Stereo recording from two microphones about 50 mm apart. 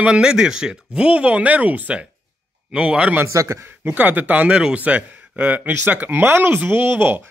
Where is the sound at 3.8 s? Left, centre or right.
Right.